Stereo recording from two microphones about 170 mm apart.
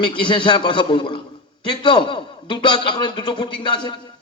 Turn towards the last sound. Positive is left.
turn(degrees=30)  # may be behind; listen again after turning